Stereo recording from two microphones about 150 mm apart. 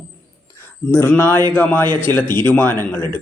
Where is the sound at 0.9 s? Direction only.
15° left (ahead or behind).